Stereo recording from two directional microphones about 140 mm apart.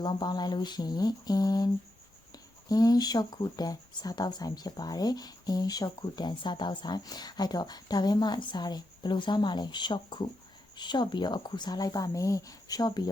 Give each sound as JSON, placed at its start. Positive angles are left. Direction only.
{"t": 0.0, "sound": "speech", "side_deg": 30}